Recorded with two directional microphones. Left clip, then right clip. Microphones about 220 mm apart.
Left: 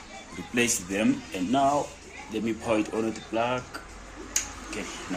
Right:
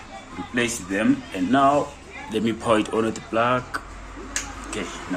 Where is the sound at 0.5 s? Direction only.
40° left (ahead or behind).